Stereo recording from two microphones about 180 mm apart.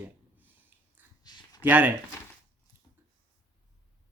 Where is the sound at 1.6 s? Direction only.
10° right (ahead or behind).